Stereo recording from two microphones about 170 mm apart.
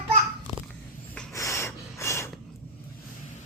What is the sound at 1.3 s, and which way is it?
Snort, 15° left (ahead or behind).